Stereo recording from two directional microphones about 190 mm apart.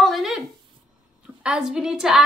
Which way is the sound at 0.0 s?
Centre (ahead or behind).